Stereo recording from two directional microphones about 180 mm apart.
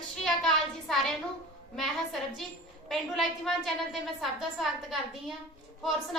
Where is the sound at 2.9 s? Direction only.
Centre (ahead or behind).